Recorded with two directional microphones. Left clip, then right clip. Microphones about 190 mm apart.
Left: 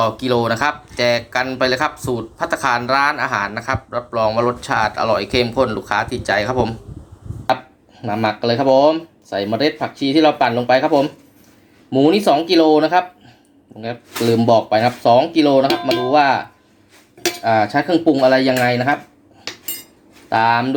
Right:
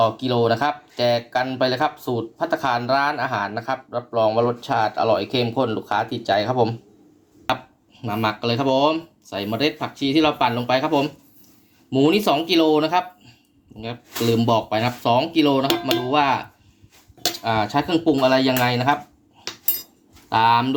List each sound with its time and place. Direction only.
0.0 s speech: centre (ahead or behind)
8.0 s speech: 20° right (ahead or behind)
17.4 s cutlery: 20° right (ahead or behind)
17.7 s speech: 25° right (ahead or behind)
20.3 s speech: 20° right (ahead or behind)